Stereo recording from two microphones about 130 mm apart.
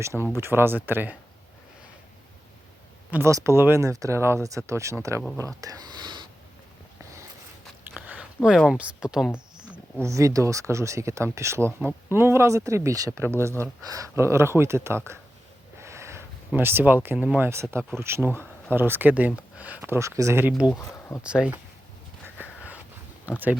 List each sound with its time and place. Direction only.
0.0 s speech: 20° right (ahead or behind)
3.1 s speech: 20° right (ahead or behind)
5.5 s a sound: 30° right (ahead or behind)
7.9 s speech: 10° right (ahead or behind)
10.0 s speech: 25° right (ahead or behind)
15.8 s snort: 20° right (ahead or behind)
16.5 s speech: 15° right (ahead or behind)
20.5 s speech: 5° right (ahead or behind)
23.2 s speech: 15° right (ahead or behind)